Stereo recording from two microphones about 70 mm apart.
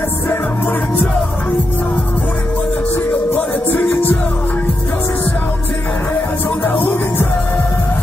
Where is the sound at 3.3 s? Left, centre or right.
Left.